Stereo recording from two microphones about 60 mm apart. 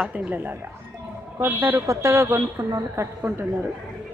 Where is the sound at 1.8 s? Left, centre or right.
Right.